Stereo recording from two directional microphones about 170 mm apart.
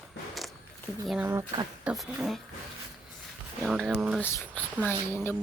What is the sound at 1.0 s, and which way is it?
Speech, 5° right (ahead or behind).